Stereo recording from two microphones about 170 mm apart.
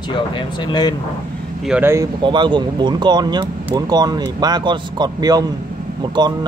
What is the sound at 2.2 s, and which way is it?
Speech, 30° right (ahead or behind).